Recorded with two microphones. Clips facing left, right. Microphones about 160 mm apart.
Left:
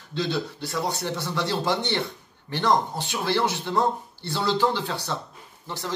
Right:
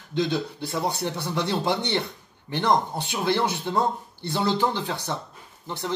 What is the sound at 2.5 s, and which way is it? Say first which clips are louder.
Speech: even; 20° right (ahead or behind).